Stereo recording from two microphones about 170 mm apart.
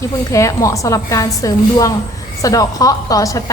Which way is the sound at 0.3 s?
20° left (ahead or behind).